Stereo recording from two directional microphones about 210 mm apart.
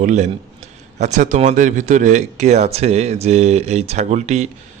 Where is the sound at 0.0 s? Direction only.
35° right (ahead or behind).